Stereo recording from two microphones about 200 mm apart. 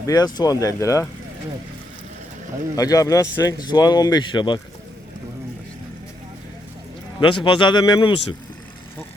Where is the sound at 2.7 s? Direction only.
20° left (ahead or behind).